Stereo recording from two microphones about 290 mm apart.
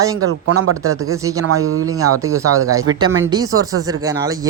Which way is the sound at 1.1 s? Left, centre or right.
Centre.